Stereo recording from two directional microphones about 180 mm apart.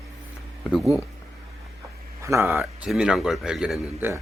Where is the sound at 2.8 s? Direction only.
5° right (ahead or behind).